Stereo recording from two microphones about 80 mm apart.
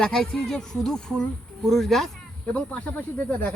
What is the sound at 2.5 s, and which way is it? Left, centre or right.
Speech, centre.